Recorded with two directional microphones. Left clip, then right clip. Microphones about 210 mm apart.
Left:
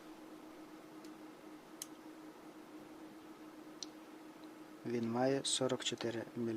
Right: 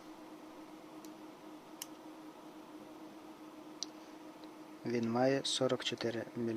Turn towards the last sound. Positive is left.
turn(degrees=-5)  # may be behind; listen again after turning